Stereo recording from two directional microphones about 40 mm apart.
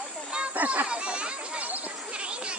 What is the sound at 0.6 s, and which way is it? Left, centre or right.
Speech, right.